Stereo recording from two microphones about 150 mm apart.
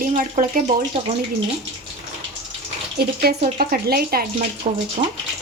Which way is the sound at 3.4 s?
60° right (ahead or behind).